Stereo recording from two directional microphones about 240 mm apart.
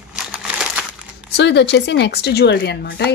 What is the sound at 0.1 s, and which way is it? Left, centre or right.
Crumpling, centre.